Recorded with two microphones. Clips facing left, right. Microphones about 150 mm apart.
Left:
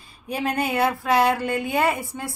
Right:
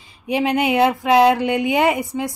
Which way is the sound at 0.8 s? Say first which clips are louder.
Right 6 dB; 20° right (ahead or behind).